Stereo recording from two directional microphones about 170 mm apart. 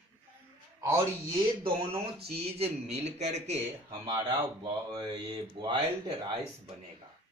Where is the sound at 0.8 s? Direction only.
15° right (ahead or behind).